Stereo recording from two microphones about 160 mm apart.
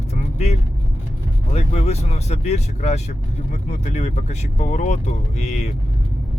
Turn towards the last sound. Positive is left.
turn(degrees=45)  # may be behind; listen again after turning